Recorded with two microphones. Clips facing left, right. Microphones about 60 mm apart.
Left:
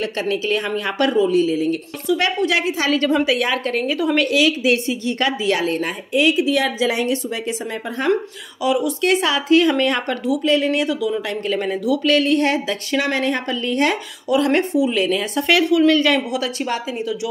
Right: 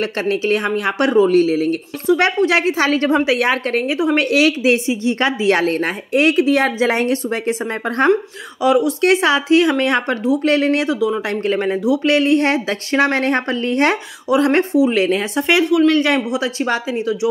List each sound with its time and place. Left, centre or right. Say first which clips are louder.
0.0 s speech: right 3 dB; right
0.7 s speech: right 4 dB; right
0.9 s speech: right 3 dB; right
1.2 s speech: right 3 dB; right
2.0 s speech: right 4 dB; right
3.8 s speech: right 2 dB; right
5.6 s speech: right 3 dB; right
8.6 s speech: right 4 dB; right
10.4 s speech: even; right
10.9 s speech: right 3 dB; right
15.9 s speech: right 1 dB; right